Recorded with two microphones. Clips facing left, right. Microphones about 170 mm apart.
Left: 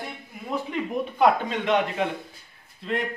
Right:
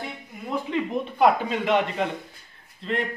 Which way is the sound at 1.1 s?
Centre (ahead or behind).